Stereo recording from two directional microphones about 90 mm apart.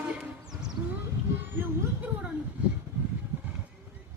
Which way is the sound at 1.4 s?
20° right (ahead or behind).